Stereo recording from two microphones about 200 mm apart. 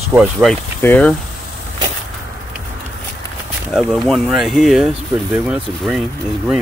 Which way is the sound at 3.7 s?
Centre (ahead or behind).